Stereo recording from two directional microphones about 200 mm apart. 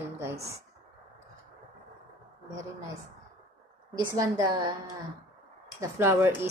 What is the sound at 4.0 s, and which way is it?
Speech, 20° right (ahead or behind).